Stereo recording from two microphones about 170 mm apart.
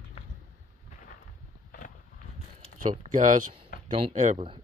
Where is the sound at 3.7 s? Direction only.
55° left (ahead or behind).